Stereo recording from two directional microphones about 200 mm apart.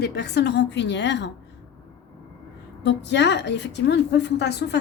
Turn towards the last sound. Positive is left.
turn(degrees=60)  # may be behind; listen again after turning